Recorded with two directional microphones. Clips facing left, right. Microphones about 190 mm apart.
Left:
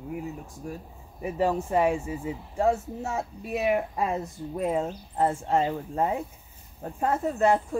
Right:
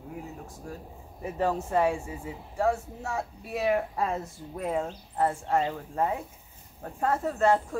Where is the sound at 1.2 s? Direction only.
15° left (ahead or behind).